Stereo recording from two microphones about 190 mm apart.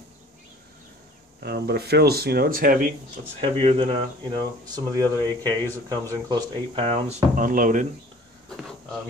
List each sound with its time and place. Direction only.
1.4 s speech: 60° right (ahead or behind)
3.3 s speech: 30° right (ahead or behind); by 7.8 s 45° right (ahead or behind)
8.5 s a sound: centre (ahead or behind)